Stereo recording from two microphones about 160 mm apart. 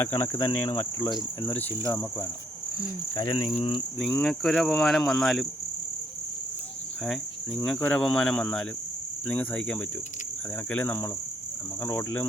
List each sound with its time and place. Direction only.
0.0 s cricket: 15° left (ahead or behind)
3.2 s speech: 25° left (ahead or behind)
3.9 s speech: 5° left (ahead or behind)
7.0 s cricket: centre (ahead or behind)
7.8 s speech: 5° left (ahead or behind)
9.2 s cricket: 10° left (ahead or behind)